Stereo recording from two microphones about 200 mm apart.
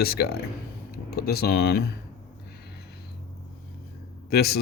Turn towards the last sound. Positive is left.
turn(degrees=50)  # may be behind; listen again after turning